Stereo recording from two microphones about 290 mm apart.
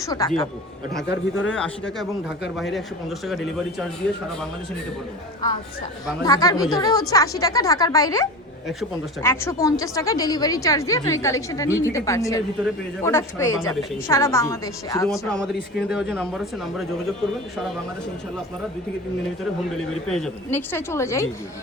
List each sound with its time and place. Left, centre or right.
0.0 s a woman's voice: centre
1.1 s speech: left
1.5 s speech: centre
3.2 s speech: centre
6.2 s a woman's voice: centre
15.4 s speech: left
15.9 s speech: centre
19.7 s a woman's voice: centre